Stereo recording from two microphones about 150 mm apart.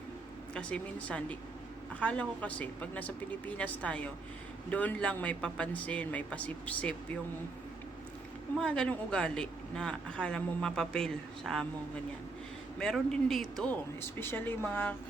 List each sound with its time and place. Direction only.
0.5 s speech: 10° left (ahead or behind)
8.5 s a woman's voice: 5° left (ahead or behind)
12.8 s a woman's voice: 5° left (ahead or behind)
14.2 s speech: 15° left (ahead or behind)